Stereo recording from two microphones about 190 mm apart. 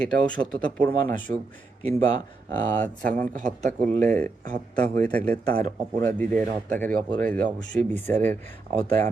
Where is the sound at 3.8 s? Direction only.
40° right (ahead or behind).